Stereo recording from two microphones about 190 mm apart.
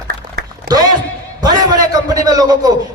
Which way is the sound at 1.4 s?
20° right (ahead or behind).